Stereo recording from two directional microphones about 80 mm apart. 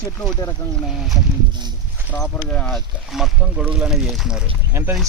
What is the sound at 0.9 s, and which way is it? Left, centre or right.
Speech, centre.